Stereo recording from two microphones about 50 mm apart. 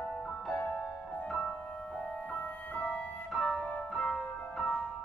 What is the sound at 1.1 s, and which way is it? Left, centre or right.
Music, left.